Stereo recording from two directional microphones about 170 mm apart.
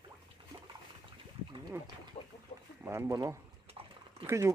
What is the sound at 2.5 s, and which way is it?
Speech, 40° left (ahead or behind).